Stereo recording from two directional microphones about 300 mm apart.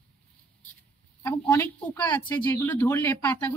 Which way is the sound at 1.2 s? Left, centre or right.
Centre.